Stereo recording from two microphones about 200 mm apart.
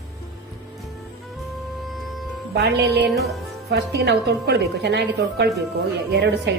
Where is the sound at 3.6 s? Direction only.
55° right (ahead or behind).